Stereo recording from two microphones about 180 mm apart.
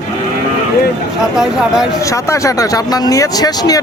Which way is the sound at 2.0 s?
15° left (ahead or behind).